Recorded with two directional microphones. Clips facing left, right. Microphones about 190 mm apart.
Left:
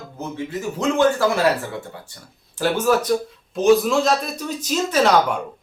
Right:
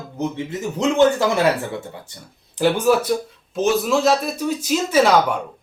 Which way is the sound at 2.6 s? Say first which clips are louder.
Right 3 dB; 15° right (ahead or behind).